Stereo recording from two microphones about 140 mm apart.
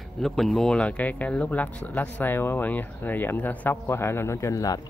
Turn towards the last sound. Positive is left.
turn(degrees=25)  # may be behind; listen again after turning